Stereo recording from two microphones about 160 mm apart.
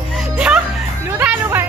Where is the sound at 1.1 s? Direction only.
10° right (ahead or behind).